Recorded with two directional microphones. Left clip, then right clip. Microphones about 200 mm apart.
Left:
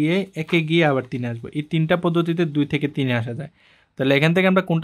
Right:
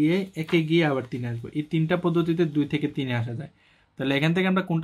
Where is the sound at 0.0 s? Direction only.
45° left (ahead or behind).